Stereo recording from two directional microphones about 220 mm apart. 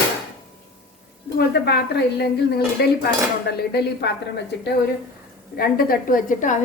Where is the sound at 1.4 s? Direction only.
45° left (ahead or behind).